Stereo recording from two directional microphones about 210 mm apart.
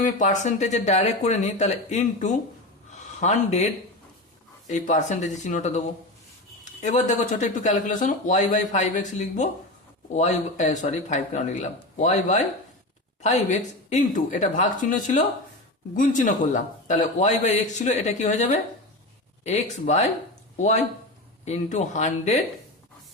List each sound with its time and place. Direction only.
0.0 s a man's voice: 35° left (ahead or behind)
2.9 s a sound: 35° left (ahead or behind)
4.6 s a man's voice: 35° left (ahead or behind)
6.8 s a man's voice: 35° left (ahead or behind)